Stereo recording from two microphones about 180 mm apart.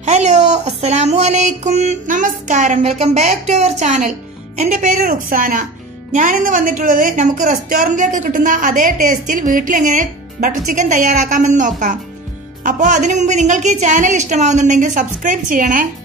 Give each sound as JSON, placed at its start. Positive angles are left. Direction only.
{"t": 0.0, "sound": "a woman's voice", "side_deg": -40}